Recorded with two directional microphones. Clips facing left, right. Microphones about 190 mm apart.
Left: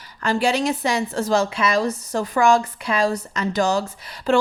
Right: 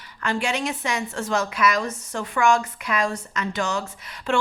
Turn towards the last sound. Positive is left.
turn(degrees=35)  # may be behind; listen again after turning